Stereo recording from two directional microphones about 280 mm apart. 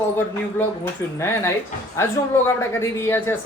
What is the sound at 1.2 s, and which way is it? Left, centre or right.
Speech, centre.